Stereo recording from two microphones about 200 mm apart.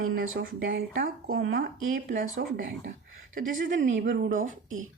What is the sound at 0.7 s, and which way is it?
Speech, 50° right (ahead or behind).